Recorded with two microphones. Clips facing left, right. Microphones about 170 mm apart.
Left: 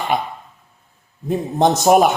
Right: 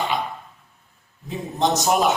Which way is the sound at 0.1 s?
55° left (ahead or behind).